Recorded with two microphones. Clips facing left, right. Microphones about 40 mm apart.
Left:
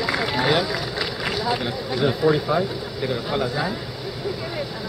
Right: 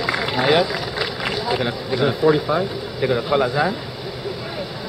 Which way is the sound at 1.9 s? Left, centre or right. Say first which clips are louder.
Right 3 dB; centre.